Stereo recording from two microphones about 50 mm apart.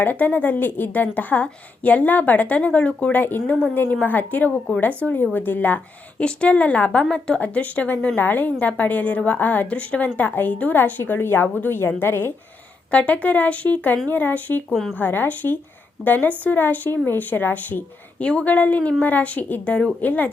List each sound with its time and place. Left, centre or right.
0.0 s a woman's voice: left
6.2 s speech: left
7.0 s a woman's voice: centre
7.3 s a woman's voice: left
12.9 s a woman's voice: left
14.7 s a woman's voice: centre
14.9 s a woman's voice: left